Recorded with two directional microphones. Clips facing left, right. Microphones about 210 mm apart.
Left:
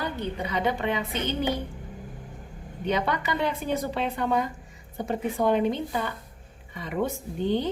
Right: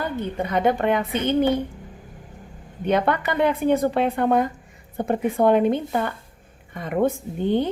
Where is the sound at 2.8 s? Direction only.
55° right (ahead or behind).